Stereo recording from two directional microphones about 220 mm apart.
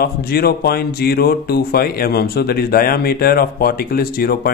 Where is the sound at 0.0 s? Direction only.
45° left (ahead or behind).